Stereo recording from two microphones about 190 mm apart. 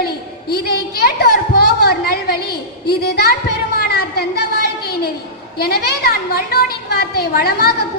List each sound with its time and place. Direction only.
0.5 s a sound: 55° left (ahead or behind)
2.8 s a woman's voice: 55° left (ahead or behind)
5.5 s a woman's voice: 55° left (ahead or behind)